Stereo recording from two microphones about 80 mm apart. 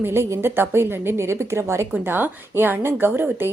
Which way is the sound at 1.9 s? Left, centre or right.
Right.